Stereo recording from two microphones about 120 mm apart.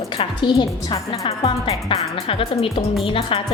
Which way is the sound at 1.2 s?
60° left (ahead or behind).